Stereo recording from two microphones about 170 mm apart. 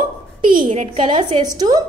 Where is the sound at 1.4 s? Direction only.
25° right (ahead or behind).